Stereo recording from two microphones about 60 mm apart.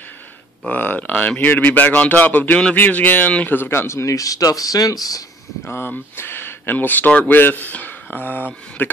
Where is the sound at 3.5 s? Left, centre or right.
Left.